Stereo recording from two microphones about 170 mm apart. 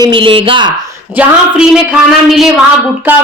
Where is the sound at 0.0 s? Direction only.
30° right (ahead or behind).